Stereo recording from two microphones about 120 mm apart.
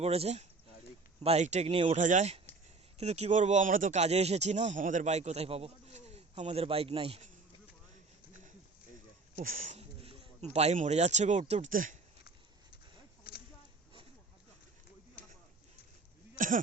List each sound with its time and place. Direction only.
0.0 s speech: 60° right (ahead or behind)
2.0 s speech: 90° right
3.0 s speech: 65° right (ahead or behind)
9.6 s speech: 90° right
10.5 s speech: 65° right (ahead or behind); by 11.9 s 85° right